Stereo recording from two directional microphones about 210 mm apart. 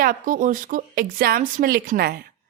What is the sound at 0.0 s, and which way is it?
Speech, 40° right (ahead or behind).